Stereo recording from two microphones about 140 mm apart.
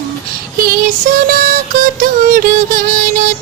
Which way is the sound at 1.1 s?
80° right.